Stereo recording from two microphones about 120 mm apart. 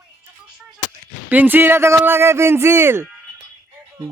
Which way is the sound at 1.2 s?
15° right (ahead or behind).